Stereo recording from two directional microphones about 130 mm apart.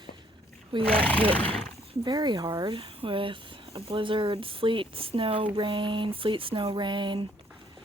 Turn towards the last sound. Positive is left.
turn(degrees=-40)  # may be behind; listen again after turning